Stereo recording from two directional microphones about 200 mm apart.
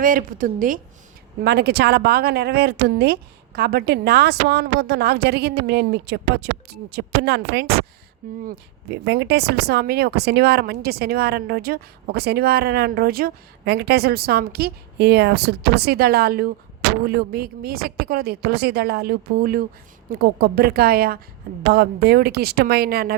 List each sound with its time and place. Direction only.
0.0 s speech: 45° right (ahead or behind)
1.4 s a woman's voice: 55° right (ahead or behind)